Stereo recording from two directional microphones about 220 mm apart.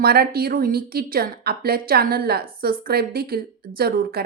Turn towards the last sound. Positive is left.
turn(degrees=-45)  # may be behind; listen again after turning